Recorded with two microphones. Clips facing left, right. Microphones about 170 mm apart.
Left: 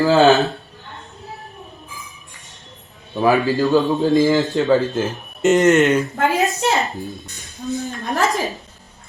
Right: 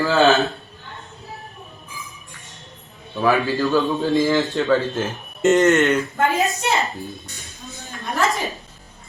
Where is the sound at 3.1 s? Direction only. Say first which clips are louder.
Left 3 dB; 20° left (ahead or behind).